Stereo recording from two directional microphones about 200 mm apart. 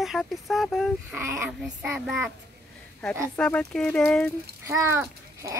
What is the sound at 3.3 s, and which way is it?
Speech, 5° left (ahead or behind).